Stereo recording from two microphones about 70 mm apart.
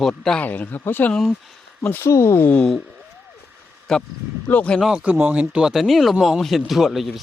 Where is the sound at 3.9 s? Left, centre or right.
Centre.